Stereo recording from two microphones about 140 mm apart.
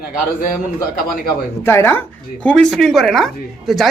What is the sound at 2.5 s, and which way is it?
Speech, 5° left (ahead or behind).